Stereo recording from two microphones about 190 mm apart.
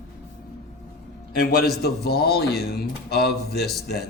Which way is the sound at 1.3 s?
50° left (ahead or behind).